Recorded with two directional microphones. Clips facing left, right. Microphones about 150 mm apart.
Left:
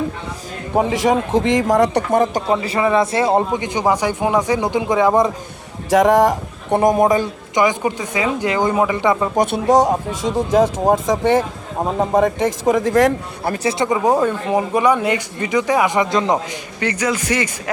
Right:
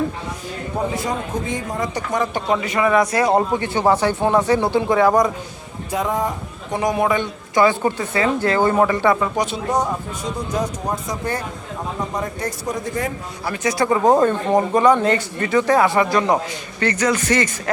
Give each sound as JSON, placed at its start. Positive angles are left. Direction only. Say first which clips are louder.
{"t": 0.8, "sound": "a man's voice", "louder": "left 8 dB", "side_deg": 90}
{"t": 2.2, "sound": "speech", "louder": "left 3 dB", "side_deg": 35}
{"t": 5.9, "sound": "a man's voice", "louder": "left 9 dB", "side_deg": 90}
{"t": 6.7, "sound": "a man's voice", "louder": "left 5 dB", "side_deg": 45}
{"t": 7.5, "sound": "speech", "louder": "right 1 dB", "side_deg": 15}
{"t": 9.3, "sound": "speech", "louder": "left 5 dB", "side_deg": 55}
{"t": 9.6, "sound": "a man's voice", "louder": "left 7 dB", "side_deg": 90}
{"t": 13.6, "sound": "speech", "louder": "right 1 dB", "side_deg": 25}